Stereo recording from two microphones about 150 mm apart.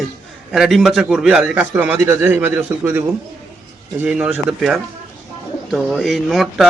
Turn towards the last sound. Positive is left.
turn(degrees=0)  # may be behind; listen again after turning